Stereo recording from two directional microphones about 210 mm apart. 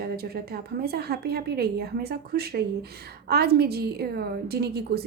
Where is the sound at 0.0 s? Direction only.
45° right (ahead or behind).